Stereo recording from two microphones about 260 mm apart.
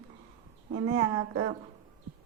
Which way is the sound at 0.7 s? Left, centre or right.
Right.